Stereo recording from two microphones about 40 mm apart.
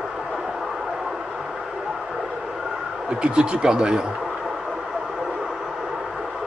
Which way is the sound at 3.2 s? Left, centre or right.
Right.